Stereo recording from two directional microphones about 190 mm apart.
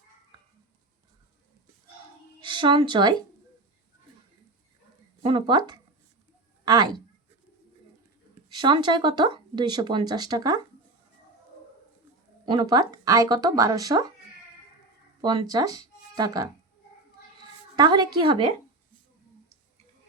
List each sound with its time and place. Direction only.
2.4 s speech: 25° right (ahead or behind)
5.2 s speech: 25° right (ahead or behind)
8.4 s speech: 25° right (ahead or behind)
12.5 s speech: 25° right (ahead or behind)
15.2 s speech: 20° right (ahead or behind)
17.7 s speech: 25° right (ahead or behind)